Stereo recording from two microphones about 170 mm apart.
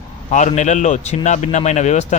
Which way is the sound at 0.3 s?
45° left (ahead or behind).